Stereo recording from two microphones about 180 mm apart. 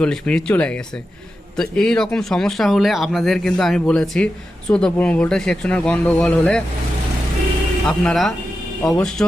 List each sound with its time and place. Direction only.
0.0 s speech: 5° left (ahead or behind)
7.9 s speech: centre (ahead or behind)